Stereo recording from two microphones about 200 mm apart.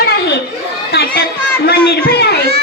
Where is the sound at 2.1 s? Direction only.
55° left (ahead or behind).